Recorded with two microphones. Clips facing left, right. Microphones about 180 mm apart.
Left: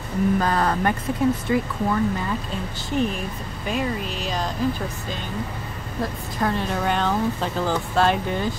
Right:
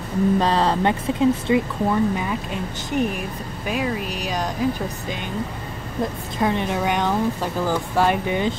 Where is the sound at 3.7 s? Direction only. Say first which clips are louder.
Right 1 dB; 5° right (ahead or behind).